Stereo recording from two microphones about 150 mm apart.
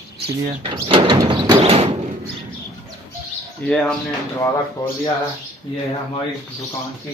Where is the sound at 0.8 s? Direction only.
30° right (ahead or behind).